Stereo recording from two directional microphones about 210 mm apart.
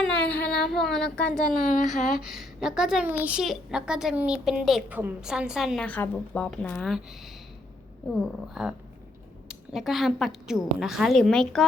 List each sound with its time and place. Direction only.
0.0 s child singing: 5° left (ahead or behind)
0.3 s child singing: 50° left (ahead or behind)
0.7 s a woman's voice: centre (ahead or behind)
1.6 s speech: 35° left (ahead or behind)
2.2 s a woman's voice: centre (ahead or behind)